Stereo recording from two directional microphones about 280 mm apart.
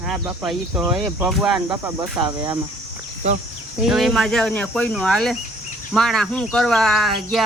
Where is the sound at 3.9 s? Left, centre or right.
Centre.